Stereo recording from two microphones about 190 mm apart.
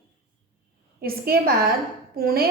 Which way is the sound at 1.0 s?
50° right (ahead or behind).